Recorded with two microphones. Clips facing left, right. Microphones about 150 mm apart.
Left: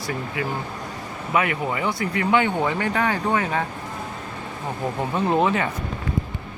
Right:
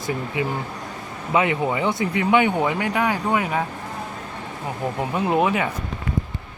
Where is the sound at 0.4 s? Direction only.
20° right (ahead or behind).